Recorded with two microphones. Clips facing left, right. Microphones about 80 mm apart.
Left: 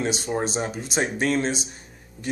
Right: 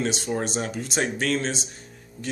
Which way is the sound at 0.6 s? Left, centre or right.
Left.